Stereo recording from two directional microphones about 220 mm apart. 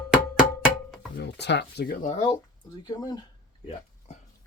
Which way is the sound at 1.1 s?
50° left (ahead or behind).